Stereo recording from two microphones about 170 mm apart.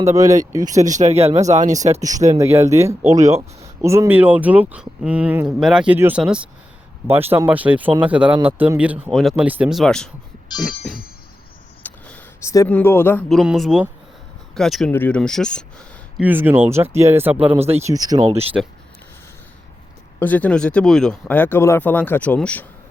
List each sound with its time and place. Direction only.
0.0 s speech: 20° right (ahead or behind)
0.7 s speech: 45° right (ahead or behind)
2.0 s speech: 20° right (ahead or behind); by 10.1 s 5° left (ahead or behind)
11.8 s a sound: 10° left (ahead or behind)
13.2 s speech: centre (ahead or behind)
16.1 s speech: 10° right (ahead or behind)
18.5 s speech: 5° right (ahead or behind)
20.1 s speech: 10° left (ahead or behind)